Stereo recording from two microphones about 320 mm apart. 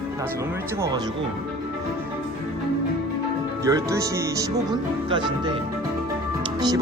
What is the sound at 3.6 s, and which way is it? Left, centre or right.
Speech, centre.